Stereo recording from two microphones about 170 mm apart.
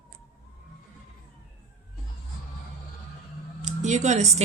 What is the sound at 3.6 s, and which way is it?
Speech, 45° right (ahead or behind).